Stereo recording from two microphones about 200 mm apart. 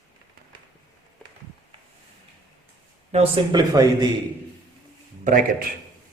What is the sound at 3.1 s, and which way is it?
Speech, 30° right (ahead or behind).